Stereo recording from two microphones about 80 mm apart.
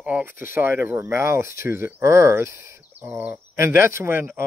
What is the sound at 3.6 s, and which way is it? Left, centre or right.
Speech, right.